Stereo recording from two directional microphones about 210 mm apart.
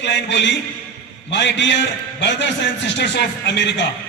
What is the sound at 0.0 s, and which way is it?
A man's voice, 55° left (ahead or behind).